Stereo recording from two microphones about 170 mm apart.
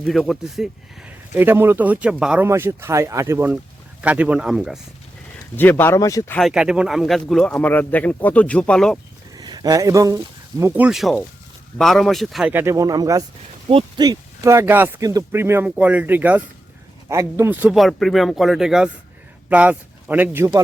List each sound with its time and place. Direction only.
0.0 s speech: centre (ahead or behind)
5.5 s speech: 10° left (ahead or behind)
6.3 s speech: centre (ahead or behind)
9.3 s speech: 25° right (ahead or behind)